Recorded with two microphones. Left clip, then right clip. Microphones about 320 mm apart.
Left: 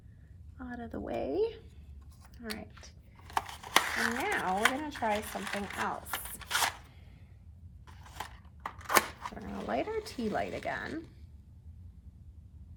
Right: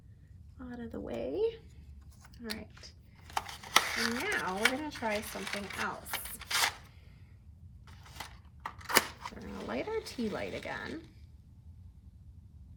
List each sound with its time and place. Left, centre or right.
0.6 s a woman's voice: centre
3.2 s a sound: centre
7.9 s dog: centre